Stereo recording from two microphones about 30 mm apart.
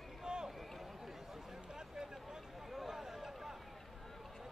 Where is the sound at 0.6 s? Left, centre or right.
Centre.